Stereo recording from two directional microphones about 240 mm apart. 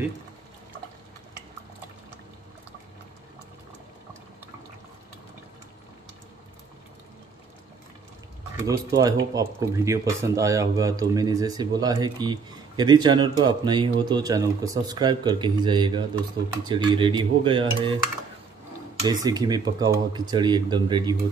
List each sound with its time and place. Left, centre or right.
8.6 s speech: centre
19.0 s speech: centre